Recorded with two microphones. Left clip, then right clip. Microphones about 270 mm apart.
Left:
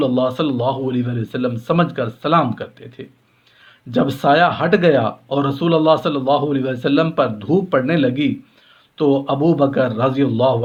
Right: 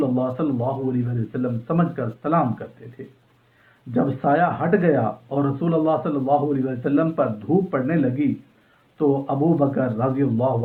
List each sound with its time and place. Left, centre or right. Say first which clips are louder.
0.0 s speech: left 5 dB; left